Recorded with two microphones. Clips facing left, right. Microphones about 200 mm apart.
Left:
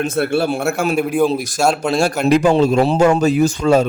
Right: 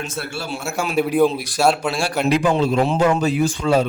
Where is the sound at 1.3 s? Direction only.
45° left (ahead or behind).